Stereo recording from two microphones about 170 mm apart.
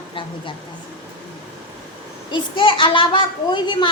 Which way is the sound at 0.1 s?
30° left (ahead or behind).